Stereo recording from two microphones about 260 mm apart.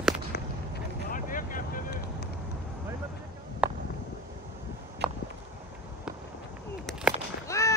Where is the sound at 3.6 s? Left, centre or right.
Centre.